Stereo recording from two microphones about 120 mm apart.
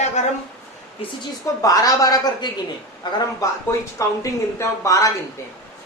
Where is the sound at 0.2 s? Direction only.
75° left (ahead or behind).